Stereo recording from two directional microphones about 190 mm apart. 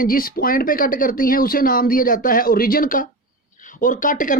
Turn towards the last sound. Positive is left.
turn(degrees=45)  # may be behind; listen again after turning